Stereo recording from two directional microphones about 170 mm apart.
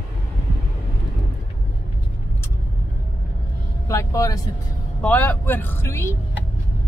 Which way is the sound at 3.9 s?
20° left (ahead or behind).